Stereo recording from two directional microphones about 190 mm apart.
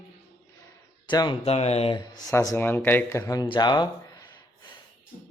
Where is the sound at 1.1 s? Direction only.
25° left (ahead or behind).